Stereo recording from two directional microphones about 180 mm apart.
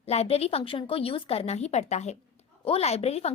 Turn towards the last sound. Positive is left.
turn(degrees=35)  # may be behind; listen again after turning